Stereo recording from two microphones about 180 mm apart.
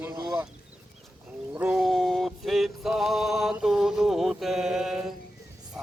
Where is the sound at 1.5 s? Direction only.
5° right (ahead or behind).